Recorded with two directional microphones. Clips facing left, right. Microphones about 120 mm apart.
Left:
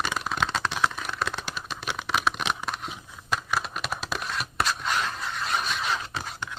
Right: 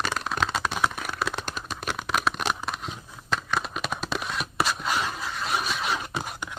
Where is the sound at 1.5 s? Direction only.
45° right (ahead or behind).